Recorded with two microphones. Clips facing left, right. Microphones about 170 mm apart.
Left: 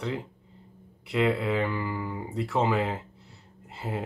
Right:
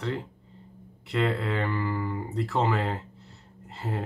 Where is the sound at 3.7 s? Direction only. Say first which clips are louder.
Even; 5° left (ahead or behind).